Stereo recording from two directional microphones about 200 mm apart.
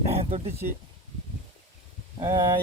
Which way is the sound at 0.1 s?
30° right (ahead or behind).